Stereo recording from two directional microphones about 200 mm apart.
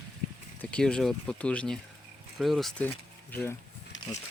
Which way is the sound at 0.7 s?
5° left (ahead or behind).